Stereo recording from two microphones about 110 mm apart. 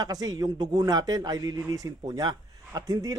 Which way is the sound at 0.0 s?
35° right (ahead or behind).